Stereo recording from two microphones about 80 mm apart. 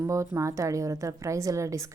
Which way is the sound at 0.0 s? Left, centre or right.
Right.